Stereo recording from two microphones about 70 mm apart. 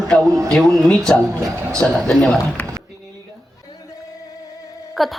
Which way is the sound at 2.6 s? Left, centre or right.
Left.